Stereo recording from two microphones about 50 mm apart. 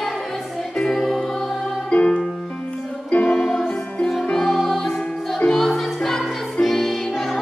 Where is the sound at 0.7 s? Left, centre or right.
Centre.